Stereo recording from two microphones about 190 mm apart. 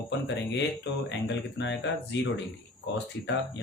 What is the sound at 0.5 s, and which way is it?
Speech, 65° left (ahead or behind).